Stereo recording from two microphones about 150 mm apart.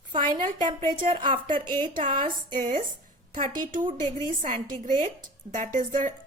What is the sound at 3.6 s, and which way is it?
Speech, 60° right (ahead or behind).